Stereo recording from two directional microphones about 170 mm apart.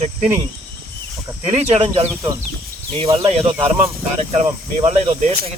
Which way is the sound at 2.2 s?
15° right (ahead or behind).